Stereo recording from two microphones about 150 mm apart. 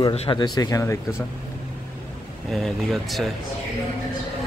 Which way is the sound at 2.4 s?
Centre (ahead or behind).